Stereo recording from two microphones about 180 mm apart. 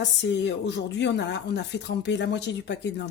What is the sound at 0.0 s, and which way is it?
Speech, 80° left.